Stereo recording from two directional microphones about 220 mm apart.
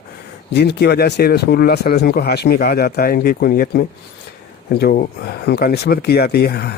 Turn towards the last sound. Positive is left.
turn(degrees=45)  # may be behind; listen again after turning